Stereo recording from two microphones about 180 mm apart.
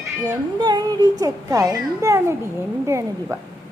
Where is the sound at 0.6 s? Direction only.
20° right (ahead or behind).